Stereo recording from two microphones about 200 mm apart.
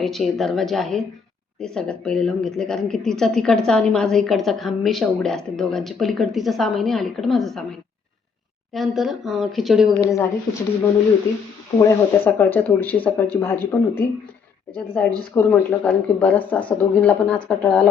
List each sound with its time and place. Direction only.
0.0 s a woman's voice: centre (ahead or behind)
8.7 s a woman's voice: centre (ahead or behind)
10.0 s speech: 15° left (ahead or behind)
11.8 s speech: 15° left (ahead or behind)
15.4 s speech: 10° left (ahead or behind)